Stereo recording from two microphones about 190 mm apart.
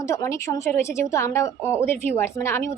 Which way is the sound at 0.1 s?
15° left (ahead or behind).